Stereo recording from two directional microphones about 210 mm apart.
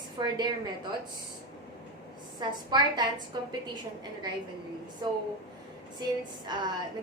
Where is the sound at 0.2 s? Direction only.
20° right (ahead or behind).